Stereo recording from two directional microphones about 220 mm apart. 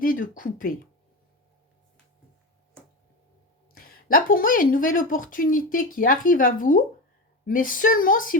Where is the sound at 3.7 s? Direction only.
40° left (ahead or behind).